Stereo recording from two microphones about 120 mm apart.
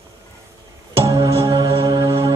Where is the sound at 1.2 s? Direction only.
25° right (ahead or behind).